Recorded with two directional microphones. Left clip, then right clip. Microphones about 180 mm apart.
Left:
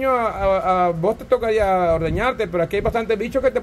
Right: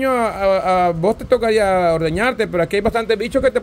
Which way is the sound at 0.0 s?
30° right (ahead or behind).